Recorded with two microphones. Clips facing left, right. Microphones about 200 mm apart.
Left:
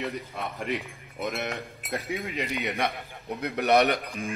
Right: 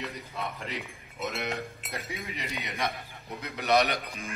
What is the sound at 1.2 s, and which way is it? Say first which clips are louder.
A man's voice: left 2 dB; 50° left (ahead or behind).